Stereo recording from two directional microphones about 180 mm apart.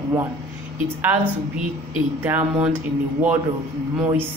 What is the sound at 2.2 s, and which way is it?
Speech, 10° right (ahead or behind).